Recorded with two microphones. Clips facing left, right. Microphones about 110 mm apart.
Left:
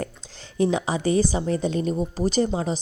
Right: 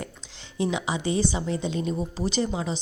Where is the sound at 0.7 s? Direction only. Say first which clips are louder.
Left 4 dB; 40° left (ahead or behind).